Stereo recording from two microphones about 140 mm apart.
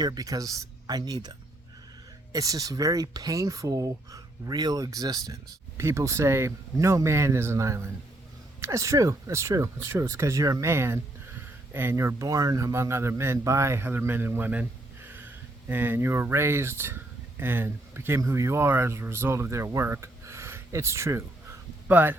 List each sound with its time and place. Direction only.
0.0 s a man's voice: 25° right (ahead or behind)